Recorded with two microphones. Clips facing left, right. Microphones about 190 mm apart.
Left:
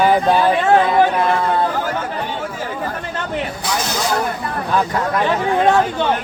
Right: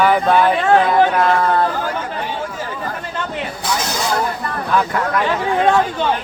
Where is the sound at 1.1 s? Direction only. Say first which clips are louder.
Right 2 dB; 20° left (ahead or behind).